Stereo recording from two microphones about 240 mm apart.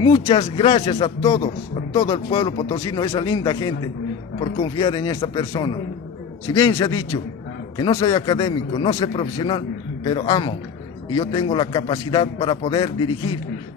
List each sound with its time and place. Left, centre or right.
0.0 s speech: left